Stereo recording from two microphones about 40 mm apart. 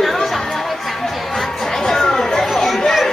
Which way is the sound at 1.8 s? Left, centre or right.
Centre.